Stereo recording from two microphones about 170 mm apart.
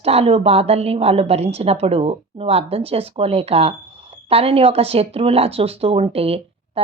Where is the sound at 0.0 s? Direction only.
35° right (ahead or behind).